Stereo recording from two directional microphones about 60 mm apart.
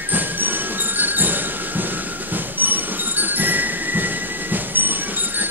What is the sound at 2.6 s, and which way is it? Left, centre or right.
Music, right.